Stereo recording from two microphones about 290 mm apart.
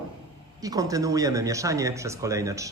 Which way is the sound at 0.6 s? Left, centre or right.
Centre.